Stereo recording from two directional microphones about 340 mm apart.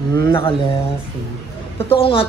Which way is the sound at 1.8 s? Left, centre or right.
Centre.